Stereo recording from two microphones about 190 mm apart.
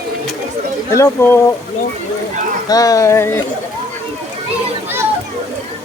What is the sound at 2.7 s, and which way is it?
Speech, 20° left (ahead or behind).